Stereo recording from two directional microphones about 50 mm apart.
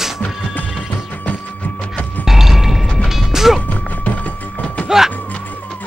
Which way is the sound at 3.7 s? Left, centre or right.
Left.